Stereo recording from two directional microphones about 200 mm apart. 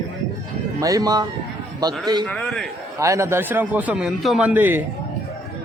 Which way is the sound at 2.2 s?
5° left (ahead or behind).